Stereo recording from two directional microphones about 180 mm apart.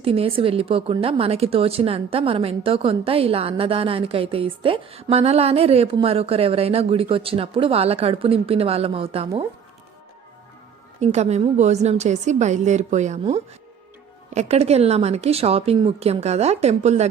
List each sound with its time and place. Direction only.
0.0 s a woman's voice: 30° right (ahead or behind)
11.0 s a woman's voice: 40° right (ahead or behind)